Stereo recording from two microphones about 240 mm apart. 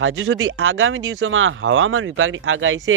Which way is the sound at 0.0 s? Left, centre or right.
Right.